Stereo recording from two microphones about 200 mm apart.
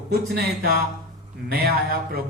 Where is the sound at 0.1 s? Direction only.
50° right (ahead or behind).